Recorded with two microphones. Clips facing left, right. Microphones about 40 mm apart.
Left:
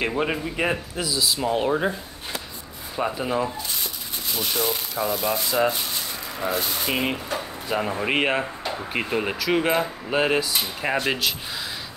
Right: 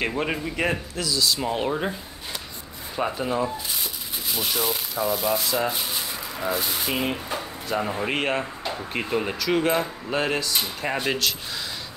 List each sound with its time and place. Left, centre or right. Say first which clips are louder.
0.0 s speech: left 1 dB; centre
0.9 s speech: even; centre
1.4 s speech: left 3 dB; centre
3.0 s speech: even; centre
4.3 s speech: left 1 dB; centre
7.6 s speech: left 1 dB; centre